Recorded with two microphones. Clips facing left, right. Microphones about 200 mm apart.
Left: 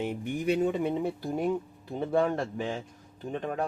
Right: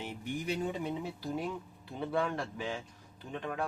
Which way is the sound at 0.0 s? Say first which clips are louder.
Left 8 dB; 55° left (ahead or behind).